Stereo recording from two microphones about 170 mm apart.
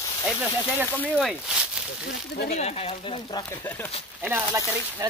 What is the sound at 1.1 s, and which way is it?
Speech, 5° right (ahead or behind).